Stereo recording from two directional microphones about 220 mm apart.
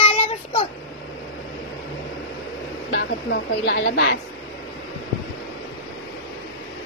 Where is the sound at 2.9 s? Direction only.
50° left (ahead or behind).